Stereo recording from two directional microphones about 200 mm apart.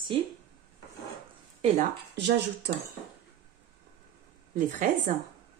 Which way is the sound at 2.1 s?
55° right (ahead or behind).